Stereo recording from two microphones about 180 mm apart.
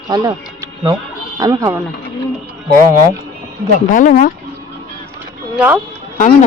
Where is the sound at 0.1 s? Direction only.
20° right (ahead or behind).